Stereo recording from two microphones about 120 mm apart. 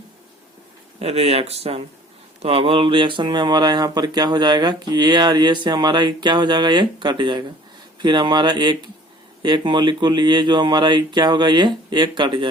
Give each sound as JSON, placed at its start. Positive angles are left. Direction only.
{"t": 1.0, "sound": "speech", "side_deg": -60}